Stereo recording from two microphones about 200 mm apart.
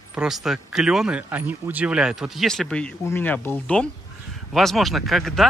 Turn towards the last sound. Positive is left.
turn(degrees=0)  # may be behind; listen again after turning